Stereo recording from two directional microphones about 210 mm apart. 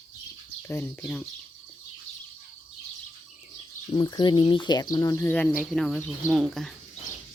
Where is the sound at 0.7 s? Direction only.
10° left (ahead or behind).